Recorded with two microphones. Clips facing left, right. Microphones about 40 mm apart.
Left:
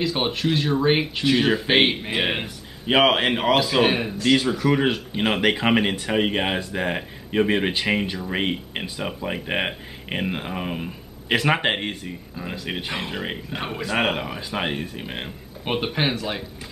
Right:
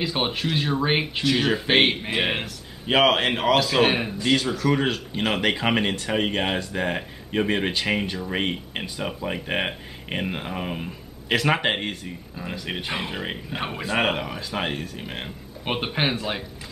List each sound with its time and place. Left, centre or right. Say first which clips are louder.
0.0 s speech: left 2 dB; centre
4.4 s speech: left 2 dB; centre
15.6 s speech: left 1 dB; centre